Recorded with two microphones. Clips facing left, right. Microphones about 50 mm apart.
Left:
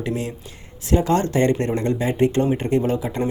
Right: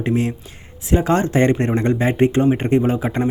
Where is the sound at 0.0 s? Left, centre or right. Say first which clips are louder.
Right 6 dB; right.